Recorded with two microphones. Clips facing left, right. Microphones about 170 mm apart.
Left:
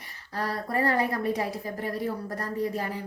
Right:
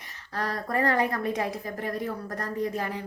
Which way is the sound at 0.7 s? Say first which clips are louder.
Right 1 dB; 35° left (ahead or behind).